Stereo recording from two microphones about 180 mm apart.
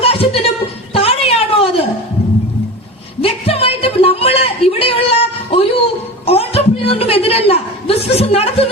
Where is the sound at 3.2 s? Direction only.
30° left (ahead or behind).